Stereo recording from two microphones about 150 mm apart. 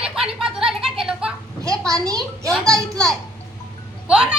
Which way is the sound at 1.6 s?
20° right (ahead or behind).